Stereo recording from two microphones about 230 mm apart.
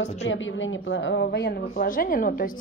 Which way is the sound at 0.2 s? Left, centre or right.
Left.